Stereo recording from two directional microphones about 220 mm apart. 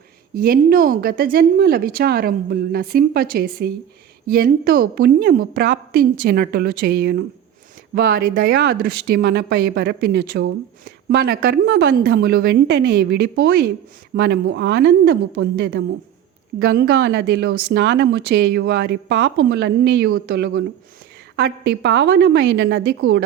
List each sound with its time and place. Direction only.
0.3 s speech: 40° right (ahead or behind)